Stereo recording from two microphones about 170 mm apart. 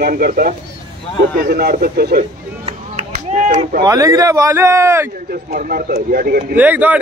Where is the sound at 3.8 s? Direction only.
20° right (ahead or behind).